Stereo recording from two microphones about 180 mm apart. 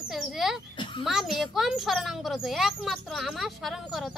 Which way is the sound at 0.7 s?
25° left (ahead or behind).